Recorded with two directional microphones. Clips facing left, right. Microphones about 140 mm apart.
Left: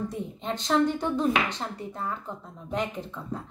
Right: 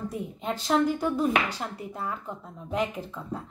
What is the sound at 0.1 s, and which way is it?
Speech, 5° right (ahead or behind).